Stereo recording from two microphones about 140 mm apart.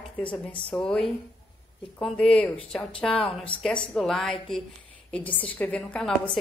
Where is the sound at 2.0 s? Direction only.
5° left (ahead or behind).